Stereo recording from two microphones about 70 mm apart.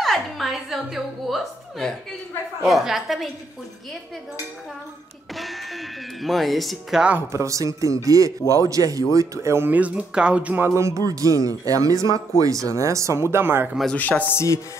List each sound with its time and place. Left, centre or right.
0.0 s chuckle: centre
2.6 s speech: centre
5.3 s speech: centre
7.2 s speech: right
9.7 s speech: right
10.6 s speech: right
13.9 s chopping: left
14.3 s music: left